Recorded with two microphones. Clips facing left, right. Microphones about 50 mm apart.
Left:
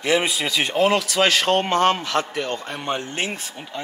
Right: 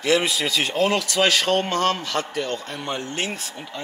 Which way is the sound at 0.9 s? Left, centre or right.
Centre.